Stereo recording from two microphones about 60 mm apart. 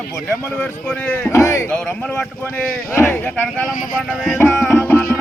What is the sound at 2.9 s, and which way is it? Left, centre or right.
Speech, left.